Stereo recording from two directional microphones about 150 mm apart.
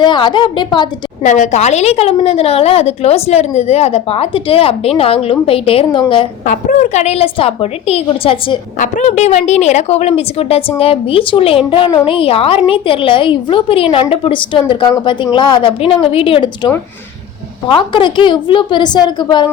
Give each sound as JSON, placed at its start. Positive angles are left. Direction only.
{"t": 0.0, "sound": "a woman's voice", "side_deg": 30}
{"t": 1.2, "sound": "a woman's voice", "side_deg": 55}
{"t": 6.4, "sound": "a woman's voice", "side_deg": 60}
{"t": 8.8, "sound": "a woman's voice", "side_deg": 50}